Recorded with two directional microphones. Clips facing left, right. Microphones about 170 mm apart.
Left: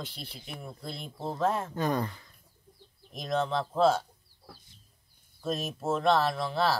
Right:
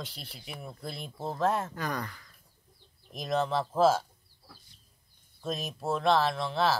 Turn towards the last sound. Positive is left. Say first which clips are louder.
# even
turn(degrees=0)  # may be behind; listen again after turning